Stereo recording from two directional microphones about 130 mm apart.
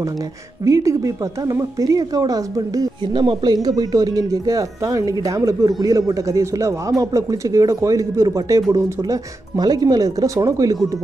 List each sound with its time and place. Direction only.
0.7 s speech: 25° right (ahead or behind)
3.1 s speech: 40° right (ahead or behind)
3.6 s speech: 30° right (ahead or behind)